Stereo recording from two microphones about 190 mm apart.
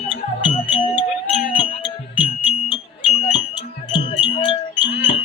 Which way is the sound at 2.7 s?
30° left (ahead or behind).